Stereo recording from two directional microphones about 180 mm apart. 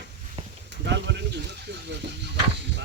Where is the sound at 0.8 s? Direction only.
75° right (ahead or behind).